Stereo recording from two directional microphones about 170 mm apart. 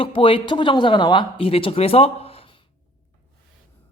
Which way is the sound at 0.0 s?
30° left (ahead or behind).